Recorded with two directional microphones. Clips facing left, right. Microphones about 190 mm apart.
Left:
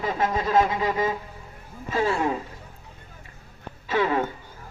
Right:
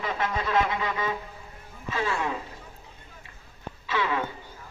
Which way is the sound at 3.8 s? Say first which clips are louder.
Left 5 dB; 45° left (ahead or behind).